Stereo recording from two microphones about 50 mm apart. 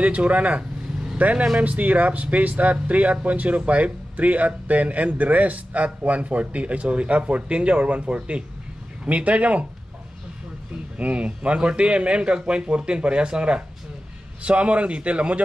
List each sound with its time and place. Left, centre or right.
0.0 s speech: right
11.0 s speech: right